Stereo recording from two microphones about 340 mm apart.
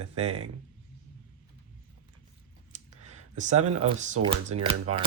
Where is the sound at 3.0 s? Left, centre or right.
Centre.